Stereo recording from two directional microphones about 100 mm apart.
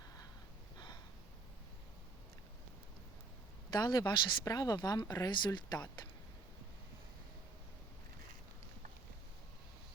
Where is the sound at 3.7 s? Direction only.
45° left (ahead or behind).